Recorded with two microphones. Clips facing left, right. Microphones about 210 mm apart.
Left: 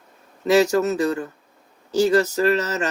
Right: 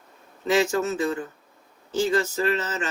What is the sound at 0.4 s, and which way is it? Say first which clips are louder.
Speech: left 5 dB; 40° left (ahead or behind).